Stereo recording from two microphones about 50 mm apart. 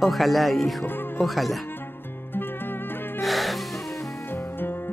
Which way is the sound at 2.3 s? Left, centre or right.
Left.